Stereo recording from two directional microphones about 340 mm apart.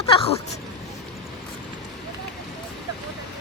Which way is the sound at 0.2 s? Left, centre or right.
Centre.